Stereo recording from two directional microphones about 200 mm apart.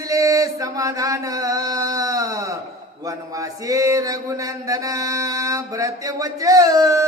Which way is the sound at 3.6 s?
15° right (ahead or behind).